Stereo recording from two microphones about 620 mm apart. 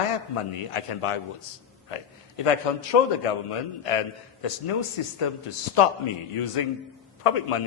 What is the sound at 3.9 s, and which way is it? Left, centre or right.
A man's voice, left.